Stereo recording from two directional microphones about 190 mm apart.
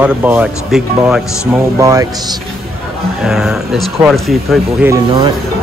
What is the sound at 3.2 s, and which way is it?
Speech, centre (ahead or behind).